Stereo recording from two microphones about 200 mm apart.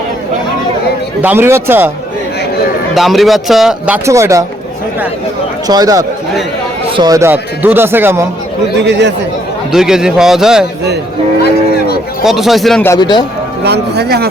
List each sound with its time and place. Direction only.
1.2 s speech: 10° right (ahead or behind)
2.9 s a man's voice: centre (ahead or behind)
5.6 s speech: 20° right (ahead or behind)
8.8 s a man's voice: 60° right (ahead or behind)
9.7 s a man's voice: 5° right (ahead or behind)
12.2 s a man's voice: centre (ahead or behind)
12.9 s a man's voice: 20° left (ahead or behind)
13.7 s a man's voice: 55° right (ahead or behind)